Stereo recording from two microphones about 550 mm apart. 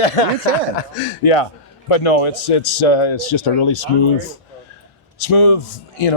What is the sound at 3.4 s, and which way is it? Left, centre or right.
Speech, left.